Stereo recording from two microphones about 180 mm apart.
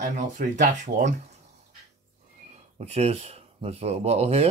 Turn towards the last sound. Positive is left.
turn(degrees=-35)  # may be behind; listen again after turning